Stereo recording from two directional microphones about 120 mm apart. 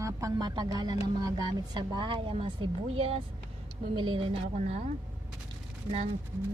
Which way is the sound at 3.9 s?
45° right (ahead or behind).